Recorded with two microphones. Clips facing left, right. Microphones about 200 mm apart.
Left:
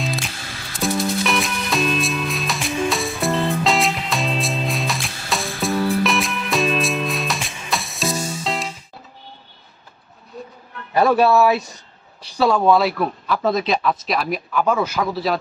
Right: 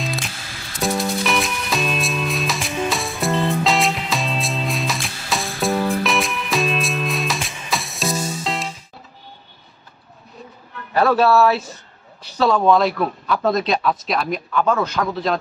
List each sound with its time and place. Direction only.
0.0 s music: centre (ahead or behind)
10.9 s speech: 15° left (ahead or behind)